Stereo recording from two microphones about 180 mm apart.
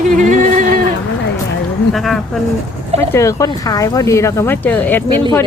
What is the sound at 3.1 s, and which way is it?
Speech, 15° left (ahead or behind).